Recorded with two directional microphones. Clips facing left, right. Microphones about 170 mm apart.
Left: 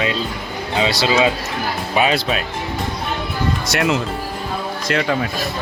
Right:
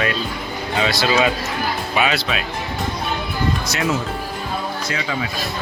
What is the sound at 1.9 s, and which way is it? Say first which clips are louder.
Speech: left 4 dB; 35° left (ahead or behind).